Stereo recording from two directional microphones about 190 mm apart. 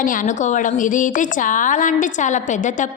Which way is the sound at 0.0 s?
45° left (ahead or behind).